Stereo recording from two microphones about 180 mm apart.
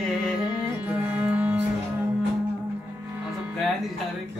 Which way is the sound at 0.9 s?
10° right (ahead or behind).